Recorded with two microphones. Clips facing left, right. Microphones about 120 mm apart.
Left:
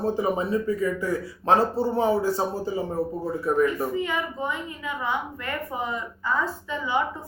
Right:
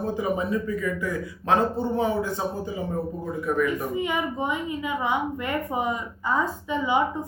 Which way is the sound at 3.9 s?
15° right (ahead or behind).